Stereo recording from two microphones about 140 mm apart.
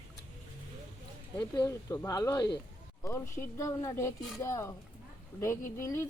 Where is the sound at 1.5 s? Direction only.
25° left (ahead or behind).